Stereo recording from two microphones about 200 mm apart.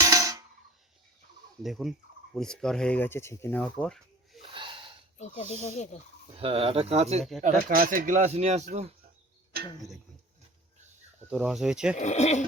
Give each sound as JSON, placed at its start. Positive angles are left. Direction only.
{"t": 0.0, "sound": "a sound", "side_deg": -15}
{"t": 1.6, "sound": "speech", "side_deg": 0}
{"t": 4.4, "sound": "gasp", "side_deg": -25}
{"t": 5.1, "sound": "speech", "side_deg": 35}
{"t": 6.3, "sound": "speech", "side_deg": -30}
{"t": 7.7, "sound": "speech", "side_deg": -45}
{"t": 11.3, "sound": "speech", "side_deg": -5}
{"t": 11.9, "sound": "speech", "side_deg": 35}